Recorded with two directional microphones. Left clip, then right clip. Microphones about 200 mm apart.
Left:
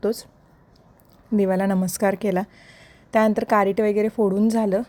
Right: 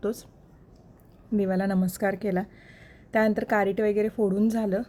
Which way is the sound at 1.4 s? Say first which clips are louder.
Left 6 dB; 30° left (ahead or behind).